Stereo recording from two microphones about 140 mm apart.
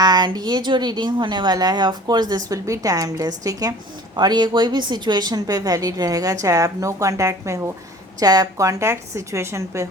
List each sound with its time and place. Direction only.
0.0 s a woman's voice: 30° right (ahead or behind)